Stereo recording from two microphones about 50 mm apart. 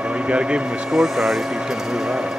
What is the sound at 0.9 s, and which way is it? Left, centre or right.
Speech, centre.